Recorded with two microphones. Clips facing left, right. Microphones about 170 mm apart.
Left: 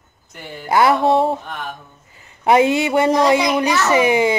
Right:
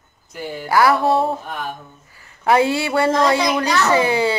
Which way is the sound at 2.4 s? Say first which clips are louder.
Left 2 dB; 20° left (ahead or behind).